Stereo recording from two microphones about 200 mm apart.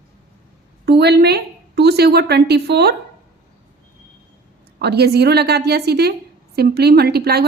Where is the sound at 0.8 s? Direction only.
55° right (ahead or behind).